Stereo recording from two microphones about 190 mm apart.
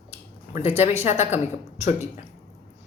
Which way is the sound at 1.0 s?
35° left (ahead or behind).